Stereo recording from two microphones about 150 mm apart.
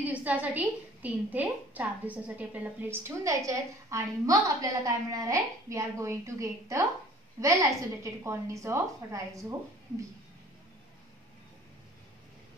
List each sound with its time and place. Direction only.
0.0 s a woman's voice: 10° right (ahead or behind)